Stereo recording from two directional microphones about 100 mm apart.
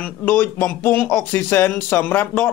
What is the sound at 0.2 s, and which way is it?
A man's voice, 15° left (ahead or behind).